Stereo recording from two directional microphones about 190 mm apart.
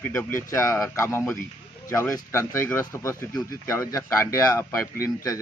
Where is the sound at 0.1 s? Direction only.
15° left (ahead or behind).